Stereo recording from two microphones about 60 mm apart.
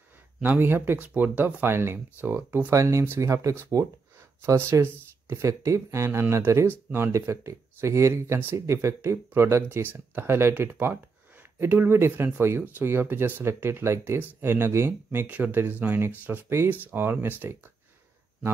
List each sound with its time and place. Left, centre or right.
0.4 s speech: right
2.7 s speech: right
4.6 s speech: right
15.0 s speech: right